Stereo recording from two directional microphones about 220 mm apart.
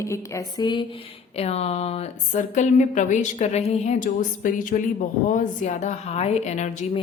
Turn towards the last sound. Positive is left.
turn(degrees=30)  # may be behind; listen again after turning